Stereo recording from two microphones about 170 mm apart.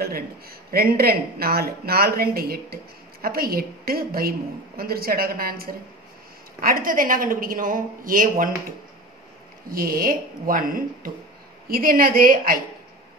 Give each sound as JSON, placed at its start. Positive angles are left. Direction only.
{"t": 0.0, "sound": "speech", "side_deg": -60}